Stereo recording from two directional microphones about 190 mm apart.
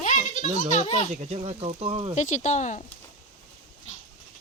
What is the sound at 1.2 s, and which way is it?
Speech, 35° right (ahead or behind).